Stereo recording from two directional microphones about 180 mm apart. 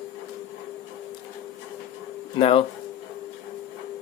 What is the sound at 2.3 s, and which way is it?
Speech, 30° left (ahead or behind).